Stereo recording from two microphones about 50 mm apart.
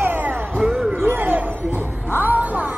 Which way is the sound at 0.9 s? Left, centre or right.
Right.